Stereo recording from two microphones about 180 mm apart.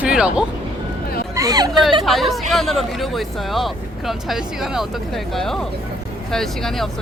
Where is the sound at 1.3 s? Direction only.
20° right (ahead or behind).